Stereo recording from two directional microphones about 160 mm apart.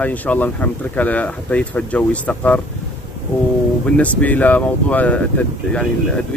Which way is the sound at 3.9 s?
10° left (ahead or behind).